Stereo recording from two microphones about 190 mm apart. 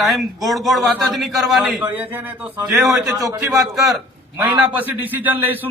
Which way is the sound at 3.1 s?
15° right (ahead or behind).